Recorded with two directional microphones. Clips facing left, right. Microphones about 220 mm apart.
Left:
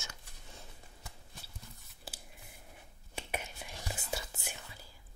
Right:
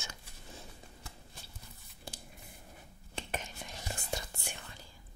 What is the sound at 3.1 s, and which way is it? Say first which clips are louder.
Whispering: even; 10° left (ahead or behind).